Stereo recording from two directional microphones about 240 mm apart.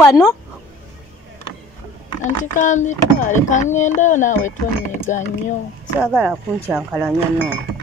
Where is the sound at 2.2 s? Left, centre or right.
Left.